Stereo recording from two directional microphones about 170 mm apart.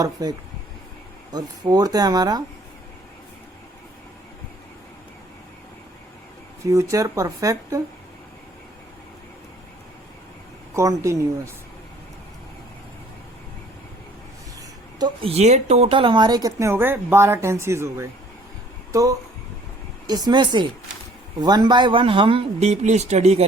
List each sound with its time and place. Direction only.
0.0 s speech: 20° right (ahead or behind)
6.7 s speech: 20° right (ahead or behind)
10.8 s a woman's voice: 15° right (ahead or behind)
14.9 s speech: 30° right (ahead or behind)